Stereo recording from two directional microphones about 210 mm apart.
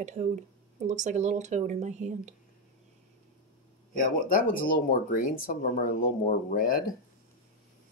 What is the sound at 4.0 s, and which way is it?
Speech, 40° left (ahead or behind).